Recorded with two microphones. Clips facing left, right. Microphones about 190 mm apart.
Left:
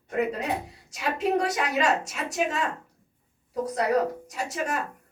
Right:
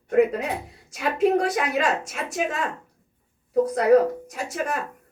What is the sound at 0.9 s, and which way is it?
A woman's voice, 55° right (ahead or behind).